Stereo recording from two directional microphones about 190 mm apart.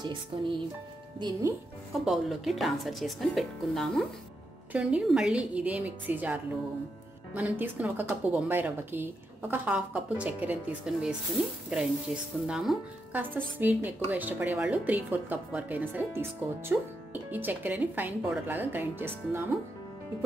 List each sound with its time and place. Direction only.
0.0 s music: 25° right (ahead or behind)
2.0 s a woman's voice: centre (ahead or behind)